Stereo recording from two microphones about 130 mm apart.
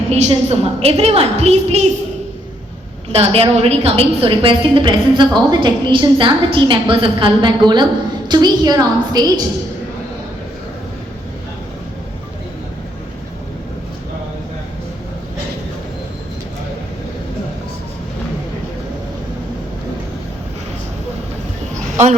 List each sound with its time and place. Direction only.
0.1 s a woman's voice: 55° right (ahead or behind)
3.1 s a woman's voice: 50° right (ahead or behind); by 9.4 s 30° right (ahead or behind)
21.8 s a sound: 65° right (ahead or behind)